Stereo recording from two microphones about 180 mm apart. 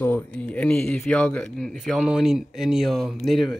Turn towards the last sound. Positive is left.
turn(degrees=0)  # may be behind; listen again after turning